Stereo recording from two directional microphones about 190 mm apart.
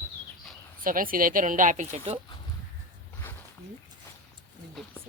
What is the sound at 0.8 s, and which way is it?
Speech, 50° right (ahead or behind).